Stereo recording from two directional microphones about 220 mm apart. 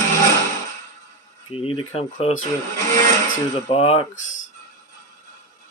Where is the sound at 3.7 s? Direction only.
25° left (ahead or behind).